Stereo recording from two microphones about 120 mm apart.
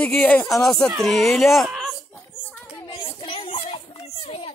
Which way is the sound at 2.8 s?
50° left (ahead or behind).